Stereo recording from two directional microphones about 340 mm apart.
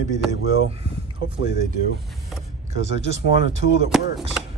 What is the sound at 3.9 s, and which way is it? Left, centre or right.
Chopping, centre.